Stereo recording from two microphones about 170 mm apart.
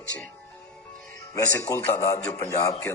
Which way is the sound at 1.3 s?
20° left (ahead or behind).